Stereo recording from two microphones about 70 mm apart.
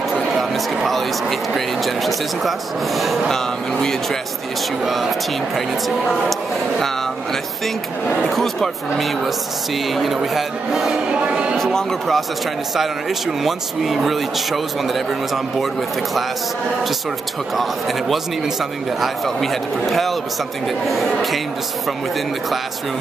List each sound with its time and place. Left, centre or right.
0.4 s a man's voice: centre
3.0 s a man's voice: centre
4.8 s a man's voice: centre
8.2 s a man's voice: centre
11.1 s speech: centre
11.5 s a man's voice: centre
13.4 s a man's voice: centre
17.6 s a man's voice: centre